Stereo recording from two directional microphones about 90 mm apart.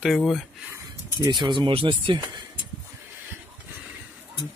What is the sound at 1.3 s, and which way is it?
Speech, 60° right (ahead or behind).